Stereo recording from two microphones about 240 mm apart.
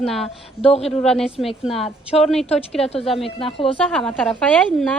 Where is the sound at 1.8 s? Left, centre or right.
Left.